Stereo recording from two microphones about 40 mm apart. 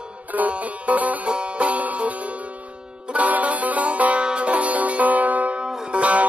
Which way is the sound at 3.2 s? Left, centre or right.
Right.